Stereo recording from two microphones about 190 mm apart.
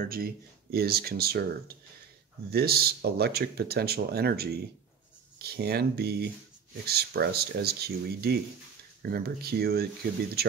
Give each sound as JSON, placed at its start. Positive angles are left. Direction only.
{"t": 0.0, "sound": "speech", "side_deg": -50}
{"t": 2.5, "sound": "speech", "side_deg": -55}